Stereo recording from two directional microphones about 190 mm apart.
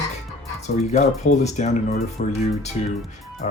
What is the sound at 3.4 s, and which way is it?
Music, 40° left (ahead or behind).